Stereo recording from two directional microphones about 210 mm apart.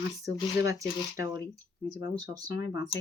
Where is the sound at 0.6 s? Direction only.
15° right (ahead or behind).